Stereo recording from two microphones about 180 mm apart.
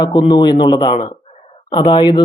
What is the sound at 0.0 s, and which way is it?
Speech, 25° left (ahead or behind).